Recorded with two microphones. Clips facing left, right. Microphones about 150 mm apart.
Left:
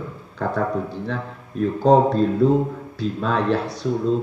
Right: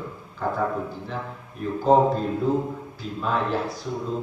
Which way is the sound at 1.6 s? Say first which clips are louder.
Left 3 dB; 75° left (ahead or behind).